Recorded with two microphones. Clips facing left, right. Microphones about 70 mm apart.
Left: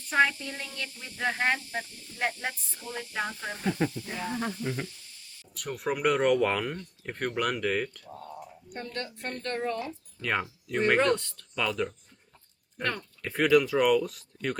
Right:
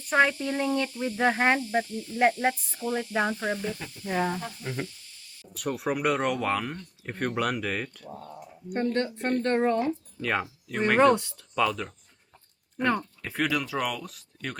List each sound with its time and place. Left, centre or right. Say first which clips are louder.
0.1 s speech: right 2 dB; centre
0.4 s speech: right 11 dB; right
4.0 s speech: right 8 dB; right
4.6 s speech: left 1 dB; centre
8.8 s speech: right 9 dB; right
10.2 s speech: right 2 dB; centre
12.7 s speech: right 6 dB; centre
13.2 s speech: left 8 dB; centre